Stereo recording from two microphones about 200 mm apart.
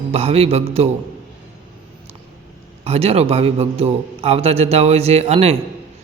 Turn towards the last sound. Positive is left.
turn(degrees=-30)  # may be behind; listen again after turning